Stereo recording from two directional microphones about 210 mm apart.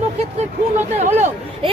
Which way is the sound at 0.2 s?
30° right (ahead or behind).